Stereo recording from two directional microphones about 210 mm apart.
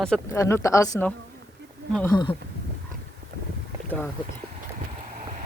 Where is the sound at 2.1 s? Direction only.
20° left (ahead or behind).